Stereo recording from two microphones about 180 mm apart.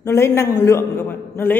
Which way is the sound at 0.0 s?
15° left (ahead or behind).